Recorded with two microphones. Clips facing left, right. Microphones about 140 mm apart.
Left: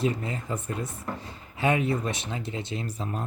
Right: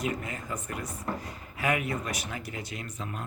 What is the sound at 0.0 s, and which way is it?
Speech, 30° left (ahead or behind).